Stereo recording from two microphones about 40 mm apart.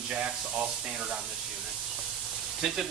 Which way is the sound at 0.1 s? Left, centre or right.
Right.